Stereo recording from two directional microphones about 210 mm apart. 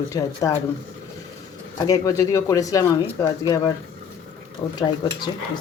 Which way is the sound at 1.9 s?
15° left (ahead or behind).